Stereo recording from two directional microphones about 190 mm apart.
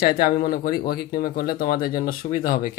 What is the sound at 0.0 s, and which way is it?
Speech, 50° left (ahead or behind).